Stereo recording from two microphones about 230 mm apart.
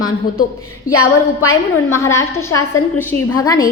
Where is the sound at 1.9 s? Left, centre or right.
Centre.